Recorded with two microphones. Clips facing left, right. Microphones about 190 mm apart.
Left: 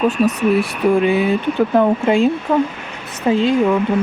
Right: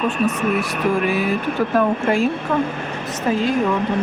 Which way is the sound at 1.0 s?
25° left (ahead or behind).